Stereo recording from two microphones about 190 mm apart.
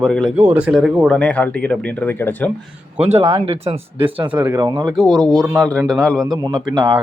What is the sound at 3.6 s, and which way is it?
Speech, 30° right (ahead or behind).